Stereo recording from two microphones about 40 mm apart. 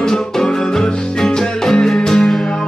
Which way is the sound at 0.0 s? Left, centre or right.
Centre.